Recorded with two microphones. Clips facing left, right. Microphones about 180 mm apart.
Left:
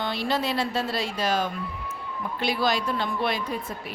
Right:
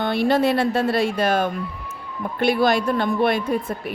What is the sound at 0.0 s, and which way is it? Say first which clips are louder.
Speech: right 8 dB; 55° right (ahead or behind).